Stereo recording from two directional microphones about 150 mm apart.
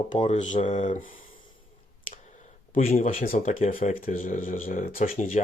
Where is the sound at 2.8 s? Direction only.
50° left (ahead or behind).